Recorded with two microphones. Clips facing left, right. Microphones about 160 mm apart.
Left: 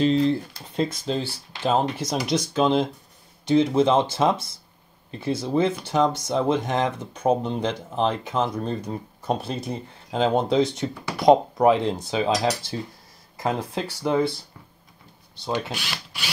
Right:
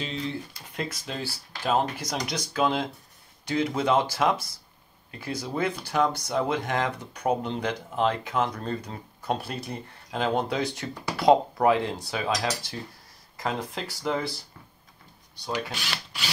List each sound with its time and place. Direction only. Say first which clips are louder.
0.0 s speech: left 12 dB; 35° left (ahead or behind)